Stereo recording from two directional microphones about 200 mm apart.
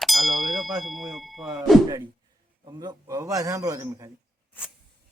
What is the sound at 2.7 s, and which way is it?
A man's voice, 20° right (ahead or behind).